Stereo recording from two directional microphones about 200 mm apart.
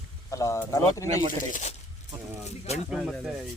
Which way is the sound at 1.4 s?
40° left (ahead or behind).